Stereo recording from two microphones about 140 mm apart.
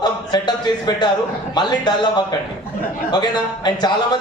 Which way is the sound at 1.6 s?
30° left (ahead or behind).